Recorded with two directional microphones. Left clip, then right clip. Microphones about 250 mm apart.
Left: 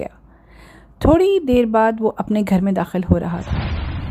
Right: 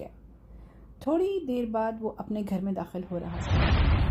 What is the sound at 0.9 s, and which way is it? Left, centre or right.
Speech, left.